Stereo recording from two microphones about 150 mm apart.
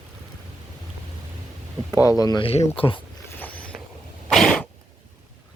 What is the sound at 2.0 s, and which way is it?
Speech, 25° left (ahead or behind).